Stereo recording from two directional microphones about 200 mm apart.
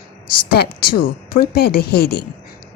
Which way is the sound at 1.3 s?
50° left (ahead or behind).